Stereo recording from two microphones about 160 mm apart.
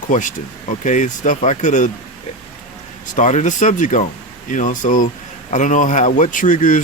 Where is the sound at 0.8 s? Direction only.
55° left (ahead or behind).